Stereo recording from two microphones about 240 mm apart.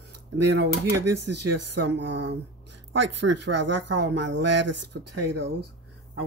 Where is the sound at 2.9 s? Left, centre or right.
Right.